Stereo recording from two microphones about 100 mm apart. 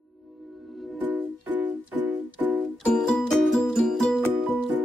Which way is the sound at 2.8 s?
10° left (ahead or behind).